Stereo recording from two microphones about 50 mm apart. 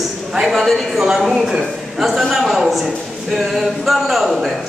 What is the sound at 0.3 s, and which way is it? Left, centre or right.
A man's voice, centre.